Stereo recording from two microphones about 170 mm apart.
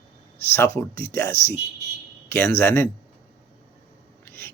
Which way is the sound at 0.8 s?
15° left (ahead or behind).